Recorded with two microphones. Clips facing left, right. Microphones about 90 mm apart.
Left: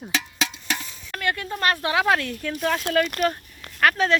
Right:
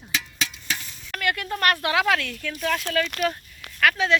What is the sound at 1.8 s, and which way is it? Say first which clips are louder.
Speech: left 1 dB; 25° left (ahead or behind).